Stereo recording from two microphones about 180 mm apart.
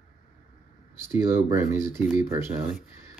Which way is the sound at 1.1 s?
15° right (ahead or behind).